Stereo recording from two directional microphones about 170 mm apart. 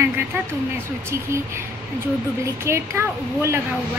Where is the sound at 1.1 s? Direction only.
15° right (ahead or behind).